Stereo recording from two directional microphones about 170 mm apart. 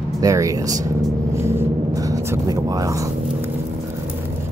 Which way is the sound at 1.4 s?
15° right (ahead or behind).